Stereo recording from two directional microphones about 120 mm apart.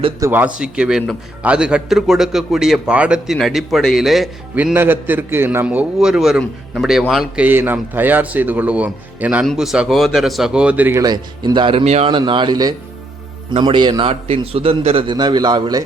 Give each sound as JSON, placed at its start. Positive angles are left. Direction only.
{"t": 0.2, "sound": "a man's voice", "side_deg": -15}
{"t": 4.5, "sound": "speech", "side_deg": -15}
{"t": 5.6, "sound": "a man's voice", "side_deg": -5}
{"t": 7.4, "sound": "a man's voice", "side_deg": -15}
{"t": 10.9, "sound": "speech", "side_deg": -30}
{"t": 12.1, "sound": "a man's voice", "side_deg": -40}
{"t": 14.1, "sound": "a man's voice", "side_deg": -55}
{"t": 15.1, "sound": "a man's voice", "side_deg": -35}